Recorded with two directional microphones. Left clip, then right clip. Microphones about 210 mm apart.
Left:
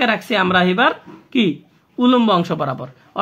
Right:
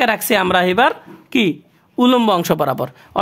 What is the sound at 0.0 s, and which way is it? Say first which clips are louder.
Speech: right 2 dB; 60° right (ahead or behind).